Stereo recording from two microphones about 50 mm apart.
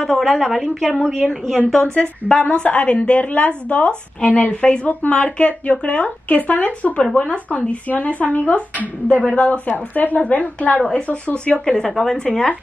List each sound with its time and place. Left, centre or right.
0.2 s a woman's voice: centre
1.8 s a woman's voice: left